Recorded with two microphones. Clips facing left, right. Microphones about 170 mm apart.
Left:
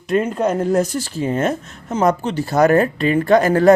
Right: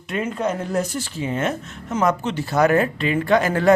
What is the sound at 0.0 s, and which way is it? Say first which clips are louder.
Speech: left 6 dB; 40° left (ahead or behind).